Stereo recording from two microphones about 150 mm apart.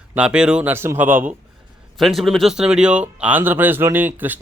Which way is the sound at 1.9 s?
Centre (ahead or behind).